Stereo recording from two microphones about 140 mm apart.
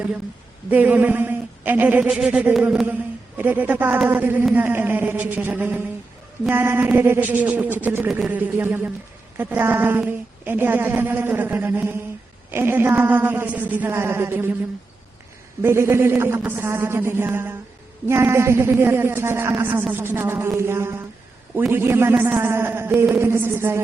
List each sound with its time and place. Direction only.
0.7 s speech: 10° right (ahead or behind)
15.6 s speech: 20° right (ahead or behind)